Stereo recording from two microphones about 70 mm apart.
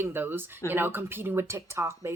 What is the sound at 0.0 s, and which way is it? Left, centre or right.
Speech, right.